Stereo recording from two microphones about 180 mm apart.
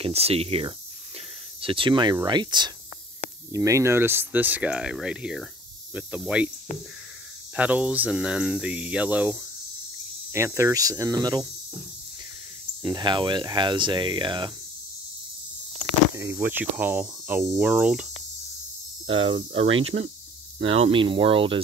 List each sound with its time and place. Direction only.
0.0 s cricket: 35° right (ahead or behind)
1.6 s speech: 30° right (ahead or behind); by 6.5 s 5° right (ahead or behind)
7.5 s speech: 5° right (ahead or behind)
12.8 s speech: 25° right (ahead or behind)
16.3 s speech: 10° right (ahead or behind)
19.1 s cricket: 35° right (ahead or behind)
20.7 s speech: 30° right (ahead or behind)